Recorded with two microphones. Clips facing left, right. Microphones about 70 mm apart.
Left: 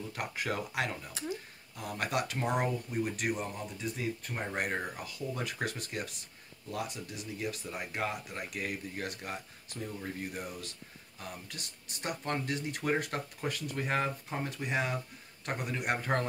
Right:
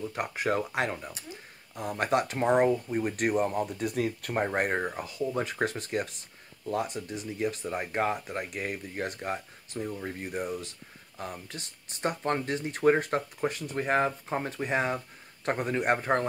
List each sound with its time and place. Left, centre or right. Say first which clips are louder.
0.1 s speech: right 6 dB; right